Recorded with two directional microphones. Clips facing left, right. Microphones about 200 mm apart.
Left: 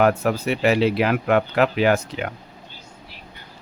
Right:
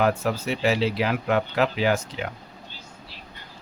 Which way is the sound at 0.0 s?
60° left (ahead or behind).